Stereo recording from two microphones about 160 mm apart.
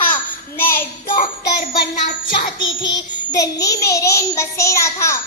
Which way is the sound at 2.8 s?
25° left (ahead or behind).